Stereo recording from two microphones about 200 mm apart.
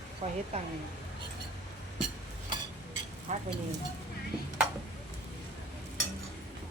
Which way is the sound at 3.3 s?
35° right (ahead or behind).